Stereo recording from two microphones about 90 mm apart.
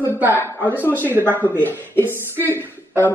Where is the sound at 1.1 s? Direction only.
25° right (ahead or behind).